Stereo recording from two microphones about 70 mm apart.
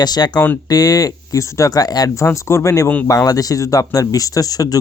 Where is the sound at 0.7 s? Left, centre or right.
Left.